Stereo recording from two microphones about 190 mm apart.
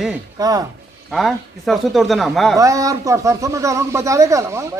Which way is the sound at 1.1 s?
Centre (ahead or behind).